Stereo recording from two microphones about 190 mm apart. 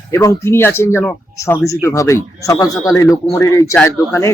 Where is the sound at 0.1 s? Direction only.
15° left (ahead or behind).